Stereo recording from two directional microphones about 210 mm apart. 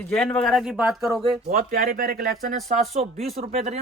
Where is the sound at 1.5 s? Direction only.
40° right (ahead or behind).